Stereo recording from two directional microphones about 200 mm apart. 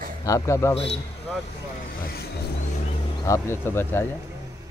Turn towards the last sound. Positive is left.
turn(degrees=10)  # may be behind; listen again after turning